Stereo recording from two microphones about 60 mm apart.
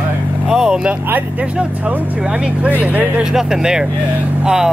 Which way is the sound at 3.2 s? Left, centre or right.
Centre.